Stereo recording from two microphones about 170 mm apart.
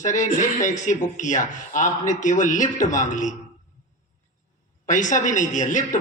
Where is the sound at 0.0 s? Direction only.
45° left (ahead or behind).